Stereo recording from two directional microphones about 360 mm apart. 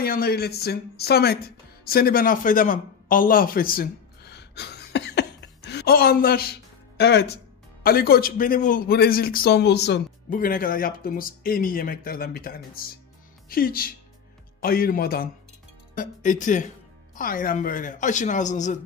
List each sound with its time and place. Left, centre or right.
0.0 s a man's voice: left
1.9 s a sound: left
7.8 s a man's voice: left